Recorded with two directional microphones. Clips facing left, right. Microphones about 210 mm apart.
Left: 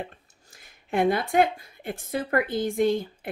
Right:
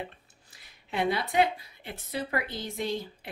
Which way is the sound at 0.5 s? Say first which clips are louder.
Left 8 dB; 50° left (ahead or behind).